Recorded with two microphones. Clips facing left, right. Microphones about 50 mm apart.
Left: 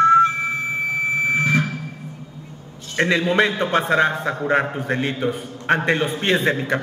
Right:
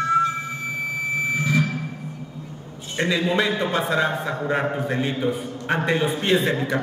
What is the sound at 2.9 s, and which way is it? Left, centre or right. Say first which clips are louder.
A man's voice: left 4 dB; left.